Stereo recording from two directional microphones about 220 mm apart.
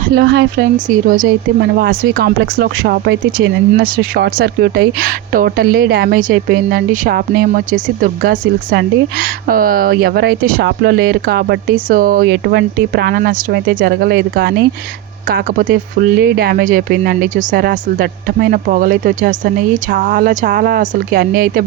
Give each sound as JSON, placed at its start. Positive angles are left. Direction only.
{"t": 0.2, "sound": "speech", "side_deg": -50}
{"t": 0.9, "sound": "speech", "side_deg": -40}